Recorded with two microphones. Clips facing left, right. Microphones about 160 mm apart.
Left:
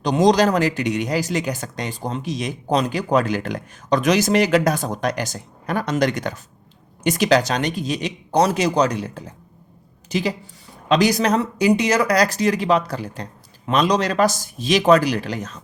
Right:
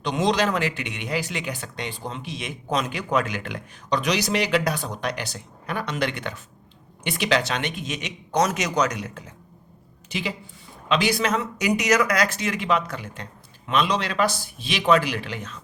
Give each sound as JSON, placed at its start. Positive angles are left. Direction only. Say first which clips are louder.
{"t": 0.0, "sound": "a woman's voice", "louder": "left 7 dB", "side_deg": 40}